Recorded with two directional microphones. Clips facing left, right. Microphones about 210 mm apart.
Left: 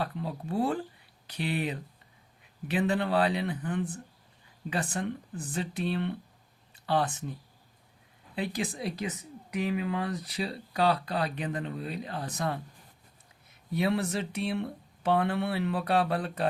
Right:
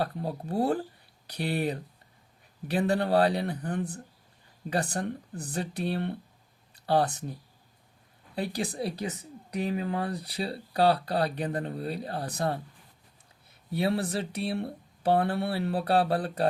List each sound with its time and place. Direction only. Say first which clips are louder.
0.0 s speech: right 3 dB; 40° right (ahead or behind)
8.4 s speech: right 2 dB; 35° right (ahead or behind)
13.7 s speech: even; 30° right (ahead or behind)